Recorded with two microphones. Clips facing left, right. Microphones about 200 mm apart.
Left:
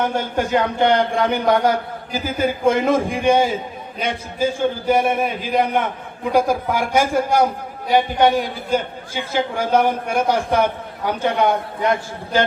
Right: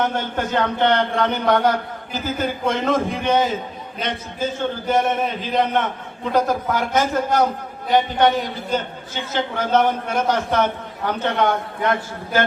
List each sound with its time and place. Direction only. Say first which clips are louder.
0.0 s a man's voice: left 2 dB; 10° left (ahead or behind)